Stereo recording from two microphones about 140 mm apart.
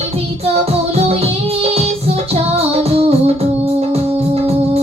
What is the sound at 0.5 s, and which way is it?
Music, 45° right (ahead or behind).